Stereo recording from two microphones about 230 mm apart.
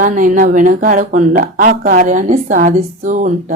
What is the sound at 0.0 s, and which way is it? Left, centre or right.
Speech, right.